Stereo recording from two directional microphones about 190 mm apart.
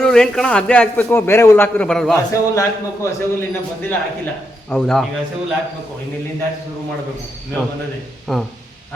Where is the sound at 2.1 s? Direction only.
15° left (ahead or behind).